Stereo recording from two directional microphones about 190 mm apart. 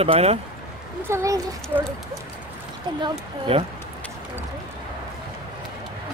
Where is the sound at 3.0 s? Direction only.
30° right (ahead or behind).